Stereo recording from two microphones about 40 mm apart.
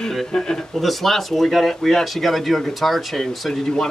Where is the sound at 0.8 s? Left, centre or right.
Centre.